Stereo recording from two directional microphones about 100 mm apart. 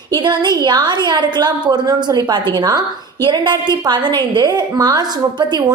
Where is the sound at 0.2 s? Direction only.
50° right (ahead or behind).